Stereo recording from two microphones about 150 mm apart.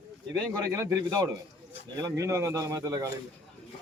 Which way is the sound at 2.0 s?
20° right (ahead or behind).